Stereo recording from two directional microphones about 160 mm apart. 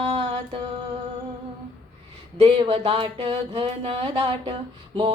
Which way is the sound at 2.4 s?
35° right (ahead or behind).